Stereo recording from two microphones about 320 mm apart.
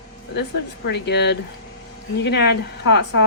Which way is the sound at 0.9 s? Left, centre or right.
Left.